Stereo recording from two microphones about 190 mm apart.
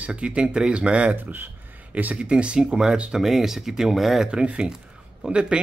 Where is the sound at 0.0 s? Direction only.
5° right (ahead or behind).